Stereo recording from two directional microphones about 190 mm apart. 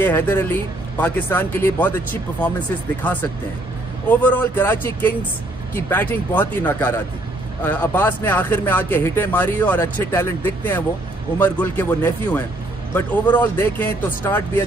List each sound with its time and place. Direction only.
0.0 s speech: 10° left (ahead or behind)
3.0 s speech: 10° left (ahead or behind)